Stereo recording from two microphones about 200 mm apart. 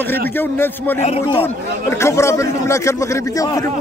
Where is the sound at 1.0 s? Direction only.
35° left (ahead or behind).